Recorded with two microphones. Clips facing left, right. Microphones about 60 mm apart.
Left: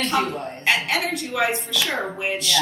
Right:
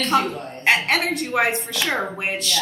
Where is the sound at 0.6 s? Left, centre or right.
Right.